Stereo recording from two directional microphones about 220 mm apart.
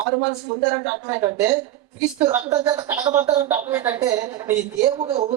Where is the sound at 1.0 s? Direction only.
10° right (ahead or behind).